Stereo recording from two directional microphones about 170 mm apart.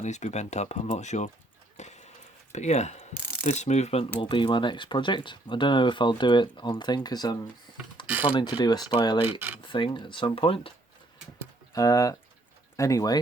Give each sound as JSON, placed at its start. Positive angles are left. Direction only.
{"t": 0.0, "sound": "speech", "side_deg": 45}
{"t": 1.7, "sound": "a sound", "side_deg": 40}
{"t": 2.5, "sound": "speech", "side_deg": 40}
{"t": 3.4, "sound": "coin", "side_deg": 40}
{"t": 4.2, "sound": "speech", "side_deg": 30}
{"t": 8.0, "sound": "mechanisms", "side_deg": -10}
{"t": 8.3, "sound": "speech", "side_deg": 25}
{"t": 11.7, "sound": "speech", "side_deg": 20}